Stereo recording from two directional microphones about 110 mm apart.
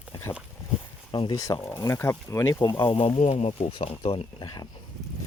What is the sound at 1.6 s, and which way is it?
Speech, 25° left (ahead or behind).